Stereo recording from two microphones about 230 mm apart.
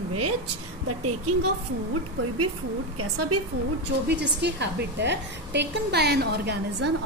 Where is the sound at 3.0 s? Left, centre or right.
Right.